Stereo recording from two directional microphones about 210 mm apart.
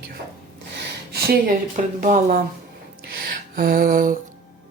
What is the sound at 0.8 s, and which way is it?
Speech, 45° right (ahead or behind).